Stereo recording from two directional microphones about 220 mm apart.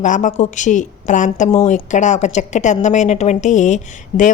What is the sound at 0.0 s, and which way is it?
A woman's voice, 35° left (ahead or behind).